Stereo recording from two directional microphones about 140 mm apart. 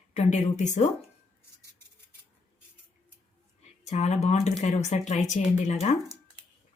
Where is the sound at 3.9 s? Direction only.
55° left (ahead or behind).